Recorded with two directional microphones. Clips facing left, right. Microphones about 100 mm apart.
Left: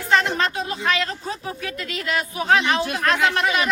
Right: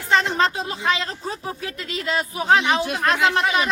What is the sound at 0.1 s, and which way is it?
A man's voice, 25° right (ahead or behind).